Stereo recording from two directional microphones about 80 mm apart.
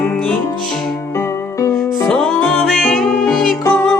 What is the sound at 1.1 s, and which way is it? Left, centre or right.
Music, left.